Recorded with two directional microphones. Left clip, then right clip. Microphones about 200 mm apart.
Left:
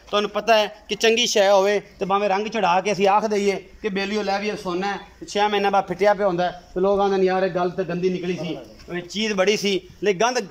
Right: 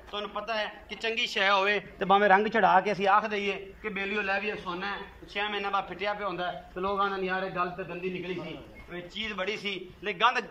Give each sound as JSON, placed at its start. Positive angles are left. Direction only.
{"t": 0.1, "sound": "a man's voice", "side_deg": 55}
{"t": 2.0, "sound": "a man's voice", "side_deg": 5}
{"t": 8.9, "sound": "a man's voice", "side_deg": 45}